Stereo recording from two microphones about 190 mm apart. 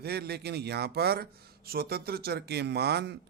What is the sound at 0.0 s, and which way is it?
Speech, 55° right (ahead or behind).